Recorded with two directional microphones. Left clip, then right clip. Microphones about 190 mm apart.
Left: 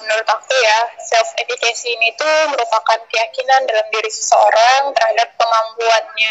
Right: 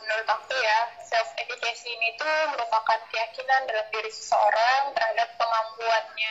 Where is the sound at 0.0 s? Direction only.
55° left (ahead or behind).